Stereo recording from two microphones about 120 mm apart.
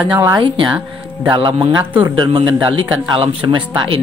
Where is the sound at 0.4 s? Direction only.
40° right (ahead or behind).